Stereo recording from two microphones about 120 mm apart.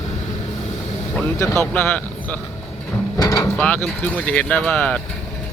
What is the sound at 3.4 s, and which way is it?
Speech, 10° left (ahead or behind).